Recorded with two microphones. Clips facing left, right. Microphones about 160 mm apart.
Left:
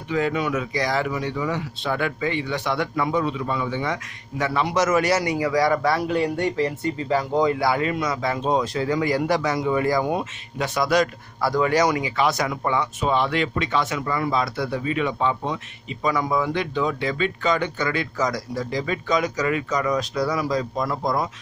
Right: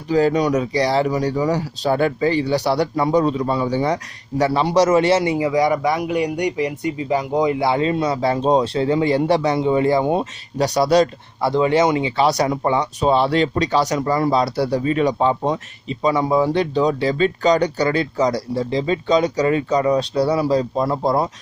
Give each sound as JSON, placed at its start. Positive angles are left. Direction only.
{"t": 0.1, "sound": "speech", "side_deg": -35}